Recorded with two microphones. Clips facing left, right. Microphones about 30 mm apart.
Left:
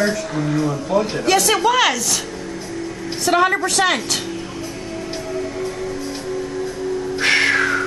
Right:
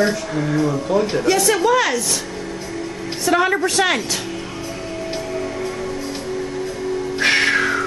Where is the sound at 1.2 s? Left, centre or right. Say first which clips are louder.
Left 1 dB; left.